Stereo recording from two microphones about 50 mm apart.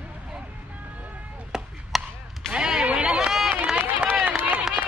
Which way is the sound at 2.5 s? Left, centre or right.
Centre.